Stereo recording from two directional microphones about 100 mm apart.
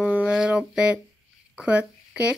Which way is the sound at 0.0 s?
15° right (ahead or behind).